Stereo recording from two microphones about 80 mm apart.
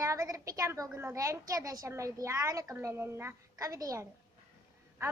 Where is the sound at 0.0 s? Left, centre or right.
Right.